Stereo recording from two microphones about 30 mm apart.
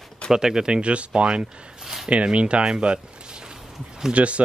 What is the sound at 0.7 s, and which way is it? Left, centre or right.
Speech, right.